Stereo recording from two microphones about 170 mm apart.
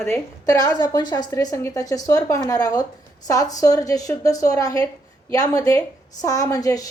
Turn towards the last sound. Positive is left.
turn(degrees=20)  # may be behind; listen again after turning